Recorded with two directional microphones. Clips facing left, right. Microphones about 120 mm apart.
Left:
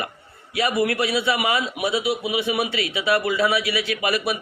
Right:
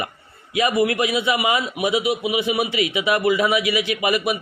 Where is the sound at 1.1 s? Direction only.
20° right (ahead or behind).